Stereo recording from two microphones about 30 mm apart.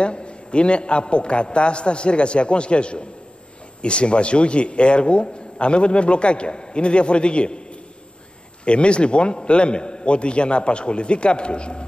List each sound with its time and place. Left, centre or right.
0.0 s a man's voice: left
8.6 s a man's voice: left